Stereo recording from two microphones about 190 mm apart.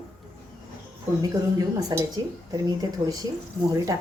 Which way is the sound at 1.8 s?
20° right (ahead or behind).